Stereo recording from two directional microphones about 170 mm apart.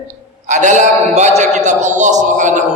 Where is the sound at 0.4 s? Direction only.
45° right (ahead or behind).